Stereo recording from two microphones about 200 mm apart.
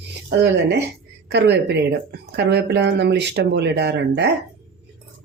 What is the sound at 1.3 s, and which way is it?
Speech, 55° right (ahead or behind).